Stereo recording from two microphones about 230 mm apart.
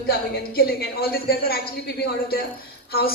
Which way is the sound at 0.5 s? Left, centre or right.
Left.